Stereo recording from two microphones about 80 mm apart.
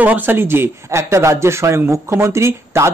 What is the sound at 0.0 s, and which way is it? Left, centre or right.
Speech, right.